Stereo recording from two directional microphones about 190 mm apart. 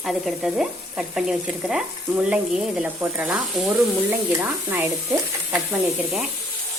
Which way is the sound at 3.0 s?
5° right (ahead or behind).